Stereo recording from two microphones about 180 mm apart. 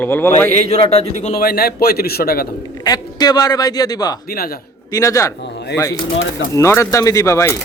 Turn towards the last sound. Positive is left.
turn(degrees=15)  # may be behind; listen again after turning